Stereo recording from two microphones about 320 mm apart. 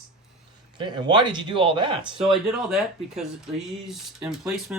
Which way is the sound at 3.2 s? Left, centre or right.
Centre.